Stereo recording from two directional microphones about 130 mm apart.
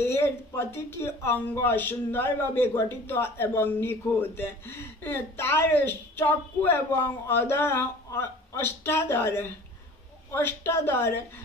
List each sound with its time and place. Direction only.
0.0 s a woman's voice: 20° left (ahead or behind)